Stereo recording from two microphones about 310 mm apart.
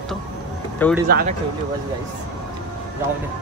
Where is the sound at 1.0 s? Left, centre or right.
Right.